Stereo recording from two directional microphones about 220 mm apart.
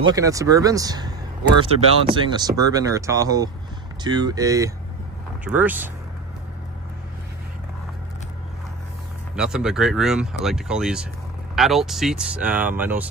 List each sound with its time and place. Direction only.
0.0 s speech: 15° right (ahead or behind)
9.3 s speech: 5° right (ahead or behind)